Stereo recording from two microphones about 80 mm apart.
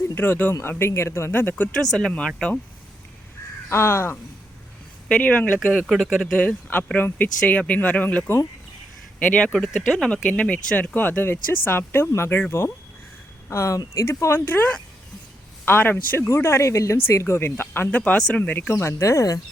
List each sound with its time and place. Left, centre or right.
0.1 s speech: left
1.8 s speech: centre
3.7 s speech: left
5.0 s speech: centre
6.0 s speech: centre
6.3 s speech: centre
10.1 s speech: centre; by 18.0 s left
18.0 s speech: centre
18.7 s speech: left